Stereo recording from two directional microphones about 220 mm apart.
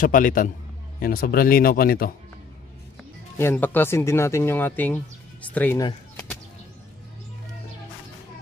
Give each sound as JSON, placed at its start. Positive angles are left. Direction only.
{"t": 0.0, "sound": "a man's voice", "side_deg": 40}
{"t": 3.0, "sound": "speech", "side_deg": 10}